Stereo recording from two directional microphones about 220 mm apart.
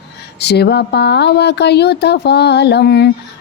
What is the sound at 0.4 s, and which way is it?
Speech, 50° left (ahead or behind).